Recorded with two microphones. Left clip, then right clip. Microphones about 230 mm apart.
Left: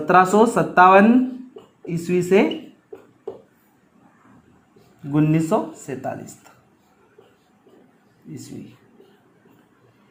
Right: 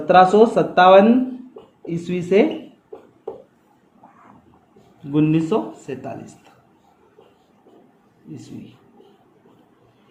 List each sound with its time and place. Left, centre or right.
0.0 s speech: left
5.1 s speech: left